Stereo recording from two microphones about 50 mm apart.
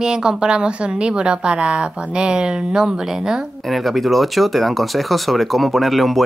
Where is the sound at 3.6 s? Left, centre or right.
Centre.